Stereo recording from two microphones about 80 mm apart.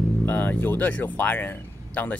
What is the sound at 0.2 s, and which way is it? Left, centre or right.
Speech, left.